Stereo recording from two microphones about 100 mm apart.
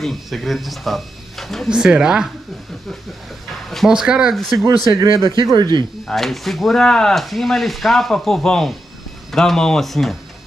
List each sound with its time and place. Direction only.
0.0 s speech: centre (ahead or behind)
1.7 s speech: 10° right (ahead or behind)
3.7 s speech: 5° right (ahead or behind)
5.1 s speech: 55° right (ahead or behind)
6.0 s speech: centre (ahead or behind)